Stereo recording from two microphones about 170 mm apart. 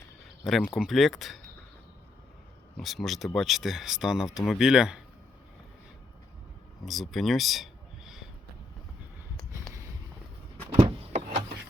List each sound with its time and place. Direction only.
0.4 s speech: centre (ahead or behind)
2.7 s speech: centre (ahead or behind)
6.8 s speech: centre (ahead or behind)
11.1 s a sound: 40° right (ahead or behind)